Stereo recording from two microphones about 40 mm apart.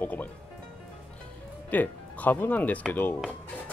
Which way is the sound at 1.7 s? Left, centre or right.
Left.